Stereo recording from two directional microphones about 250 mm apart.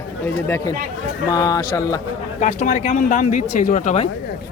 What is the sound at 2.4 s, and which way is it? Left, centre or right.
Speech, left.